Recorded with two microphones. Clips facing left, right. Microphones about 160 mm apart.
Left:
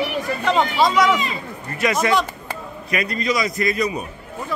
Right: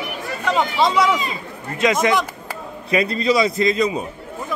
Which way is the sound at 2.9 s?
30° right (ahead or behind).